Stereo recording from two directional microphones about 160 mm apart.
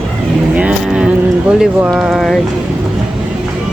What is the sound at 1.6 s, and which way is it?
Speech, 5° right (ahead or behind).